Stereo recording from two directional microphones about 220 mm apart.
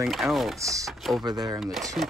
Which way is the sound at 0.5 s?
15° right (ahead or behind).